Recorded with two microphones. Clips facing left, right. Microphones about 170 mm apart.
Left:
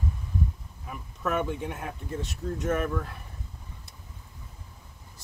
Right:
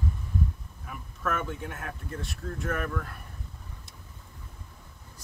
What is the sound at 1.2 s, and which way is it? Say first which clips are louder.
Speech: left 3 dB; 20° left (ahead or behind).